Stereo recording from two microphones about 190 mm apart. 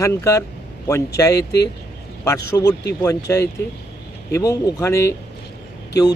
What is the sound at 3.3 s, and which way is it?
Speech, 15° left (ahead or behind).